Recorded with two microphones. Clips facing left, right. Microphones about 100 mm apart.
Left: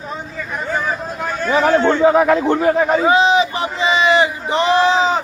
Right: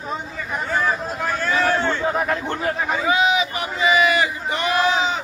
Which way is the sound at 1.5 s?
75° left (ahead or behind).